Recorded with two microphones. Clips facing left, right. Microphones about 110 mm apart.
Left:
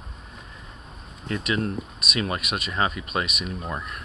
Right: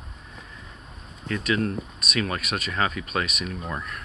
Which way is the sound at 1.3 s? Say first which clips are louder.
Right 1 dB; 25° left (ahead or behind).